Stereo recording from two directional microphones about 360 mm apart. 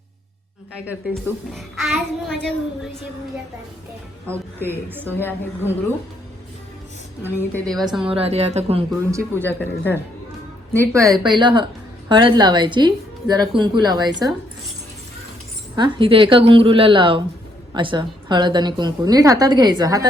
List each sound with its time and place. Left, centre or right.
0.9 s a woman's voice: centre
5.0 s a woman's voice: centre
7.2 s a woman's voice: centre
8.0 s a woman's voice: centre
9.5 s a woman's voice: centre
10.7 s a woman's voice: centre
15.7 s a woman's voice: centre